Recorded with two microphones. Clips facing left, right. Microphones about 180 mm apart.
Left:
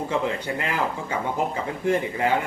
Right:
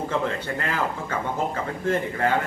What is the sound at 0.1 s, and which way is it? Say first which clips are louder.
A man's voice: left 1 dB; 15° left (ahead or behind).